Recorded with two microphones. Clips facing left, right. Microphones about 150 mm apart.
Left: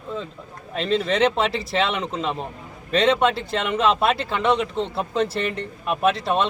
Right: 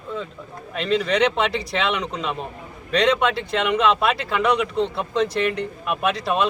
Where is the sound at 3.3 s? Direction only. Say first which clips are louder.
Right 3 dB; centre (ahead or behind).